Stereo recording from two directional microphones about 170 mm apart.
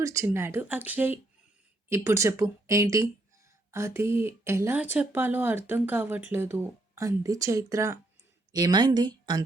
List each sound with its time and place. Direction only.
0.0 s a woman's voice: 15° right (ahead or behind)